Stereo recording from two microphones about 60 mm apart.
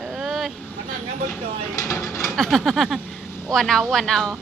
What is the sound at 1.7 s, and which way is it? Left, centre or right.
Speech, left.